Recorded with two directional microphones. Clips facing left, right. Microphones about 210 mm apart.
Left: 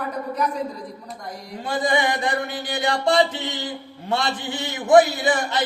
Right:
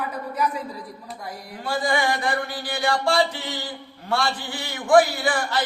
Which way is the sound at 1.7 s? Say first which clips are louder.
Left 1 dB; 20° left (ahead or behind).